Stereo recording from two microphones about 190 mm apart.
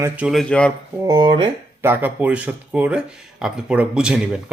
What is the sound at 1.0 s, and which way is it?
Speech, 25° right (ahead or behind).